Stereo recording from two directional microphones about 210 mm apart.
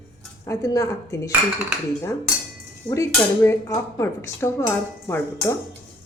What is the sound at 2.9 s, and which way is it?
Dishes, 15° left (ahead or behind).